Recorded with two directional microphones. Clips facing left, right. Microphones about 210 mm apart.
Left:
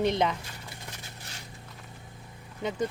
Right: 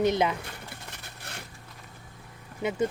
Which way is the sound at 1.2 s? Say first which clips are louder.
Right 3 dB; 60° right (ahead or behind).